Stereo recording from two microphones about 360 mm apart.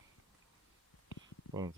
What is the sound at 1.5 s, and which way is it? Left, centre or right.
Speech, centre.